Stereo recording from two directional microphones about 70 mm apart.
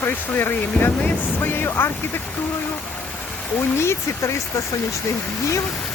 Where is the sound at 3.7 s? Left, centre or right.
Left.